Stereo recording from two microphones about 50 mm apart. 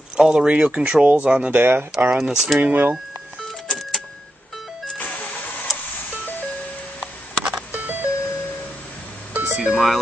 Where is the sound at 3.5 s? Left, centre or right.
Centre.